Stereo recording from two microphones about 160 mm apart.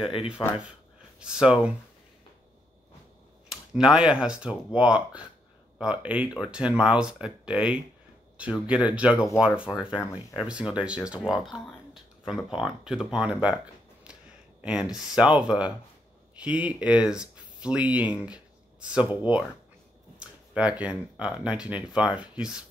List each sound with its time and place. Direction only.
0.4 s speech: 15° left (ahead or behind)
1.2 s speech: 5° right (ahead or behind)
3.4 s speech: 5° right (ahead or behind)
14.6 s speech: 5° right (ahead or behind)